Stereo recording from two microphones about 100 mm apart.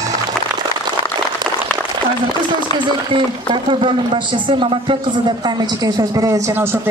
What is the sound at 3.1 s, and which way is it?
Speech, 55° right (ahead or behind).